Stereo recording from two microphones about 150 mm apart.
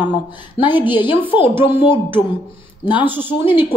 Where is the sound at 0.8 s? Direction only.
30° left (ahead or behind).